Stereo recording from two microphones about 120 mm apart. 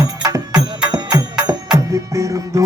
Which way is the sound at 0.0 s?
25° right (ahead or behind).